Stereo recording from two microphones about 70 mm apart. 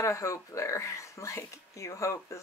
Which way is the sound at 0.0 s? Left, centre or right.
Left.